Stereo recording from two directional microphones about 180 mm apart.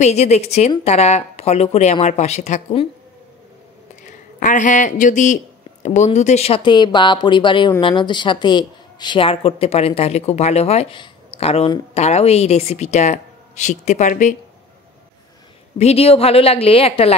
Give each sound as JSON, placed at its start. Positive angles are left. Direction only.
{"t": 0.0, "sound": "a woman's voice", "side_deg": 35}
{"t": 4.4, "sound": "a woman's voice", "side_deg": 45}
{"t": 15.8, "sound": "a woman's voice", "side_deg": 35}